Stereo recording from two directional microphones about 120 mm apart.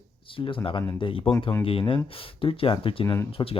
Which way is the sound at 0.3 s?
45° left (ahead or behind).